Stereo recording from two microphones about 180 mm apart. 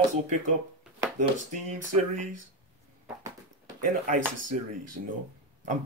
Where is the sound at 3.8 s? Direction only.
50° right (ahead or behind).